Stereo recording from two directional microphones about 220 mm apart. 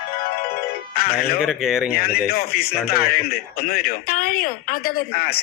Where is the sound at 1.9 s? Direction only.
45° left (ahead or behind).